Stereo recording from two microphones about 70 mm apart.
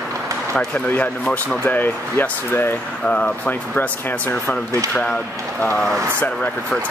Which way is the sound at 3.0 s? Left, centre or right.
Centre.